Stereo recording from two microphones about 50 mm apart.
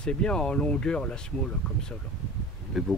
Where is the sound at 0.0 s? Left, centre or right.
Centre.